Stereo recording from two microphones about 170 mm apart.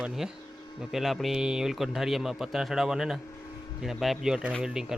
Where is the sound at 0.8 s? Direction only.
Centre (ahead or behind).